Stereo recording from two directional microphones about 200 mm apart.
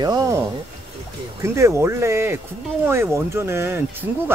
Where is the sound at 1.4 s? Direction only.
15° right (ahead or behind).